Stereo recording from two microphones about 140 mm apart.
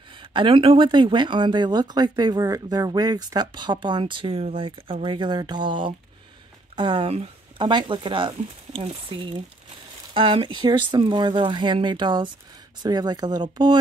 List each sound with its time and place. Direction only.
0.2 s speech: 35° right (ahead or behind)